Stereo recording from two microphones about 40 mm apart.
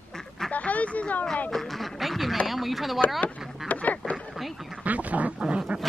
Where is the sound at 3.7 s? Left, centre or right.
Left.